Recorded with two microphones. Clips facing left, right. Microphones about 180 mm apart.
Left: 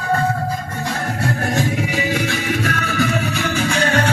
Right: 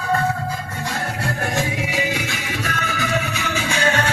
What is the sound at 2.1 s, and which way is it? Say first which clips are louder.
Music: left 6 dB; 55° left (ahead or behind).